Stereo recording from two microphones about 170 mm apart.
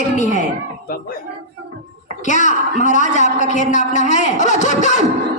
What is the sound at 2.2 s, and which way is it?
A woman's voice, 45° left (ahead or behind).